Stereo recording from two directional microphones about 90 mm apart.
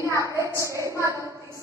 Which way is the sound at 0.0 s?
35° right (ahead or behind).